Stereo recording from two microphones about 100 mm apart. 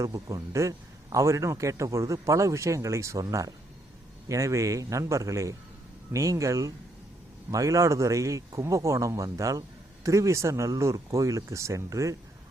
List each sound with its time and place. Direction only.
0.0 s a man's voice: 35° right (ahead or behind)